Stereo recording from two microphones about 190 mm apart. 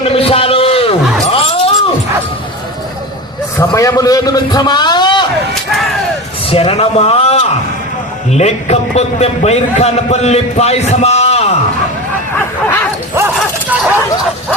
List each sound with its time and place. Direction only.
0.1 s a sound: 30° left (ahead or behind)
3.6 s a man's voice: 15° left (ahead or behind)
6.5 s a man's voice: 35° left (ahead or behind)
13.1 s dog: 10° right (ahead or behind)